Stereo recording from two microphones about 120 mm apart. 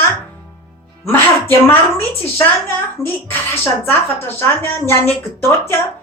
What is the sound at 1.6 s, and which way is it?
A woman's voice, 20° left (ahead or behind).